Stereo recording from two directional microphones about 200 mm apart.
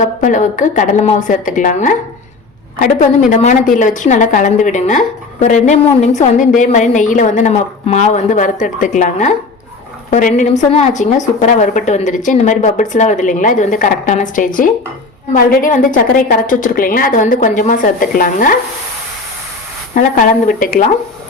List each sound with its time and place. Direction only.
0.0 s a woman's voice: 40° left (ahead or behind)
19.9 s a woman's voice: 40° left (ahead or behind)